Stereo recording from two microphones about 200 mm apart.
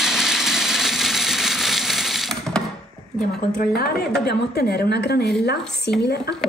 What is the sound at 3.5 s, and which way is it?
A woman's voice, 50° left (ahead or behind).